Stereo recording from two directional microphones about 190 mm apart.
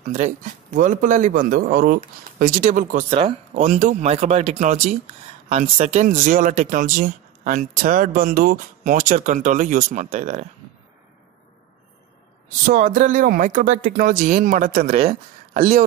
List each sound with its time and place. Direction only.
0.0 s speech: 40° right (ahead or behind)
3.1 s speech: 30° right (ahead or behind)
3.6 s speech: 40° right (ahead or behind)
12.6 s speech: 45° right (ahead or behind)